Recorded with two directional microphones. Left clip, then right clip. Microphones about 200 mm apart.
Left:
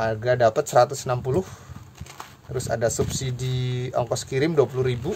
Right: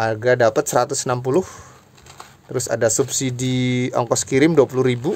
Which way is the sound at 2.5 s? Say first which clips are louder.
Right 5 dB; 50° right (ahead or behind).